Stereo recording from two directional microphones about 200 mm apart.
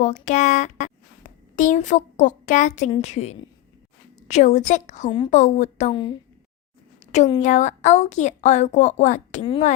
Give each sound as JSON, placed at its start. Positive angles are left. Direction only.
{"t": 0.0, "sound": "a woman's voice", "side_deg": 35}
{"t": 5.3, "sound": "a woman's voice", "side_deg": 35}
{"t": 5.9, "sound": "speech", "side_deg": 25}
{"t": 7.1, "sound": "a woman's voice", "side_deg": 35}